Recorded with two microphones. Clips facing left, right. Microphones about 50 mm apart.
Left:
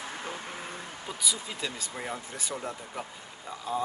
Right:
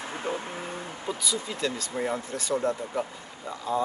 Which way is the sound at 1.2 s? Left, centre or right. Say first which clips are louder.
Right 3 dB; centre.